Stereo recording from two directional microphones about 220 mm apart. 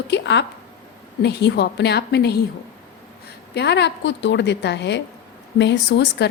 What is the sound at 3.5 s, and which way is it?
A woman's voice, 50° left (ahead or behind).